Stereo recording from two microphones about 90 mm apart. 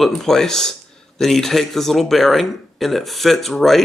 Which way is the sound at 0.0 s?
5° left (ahead or behind).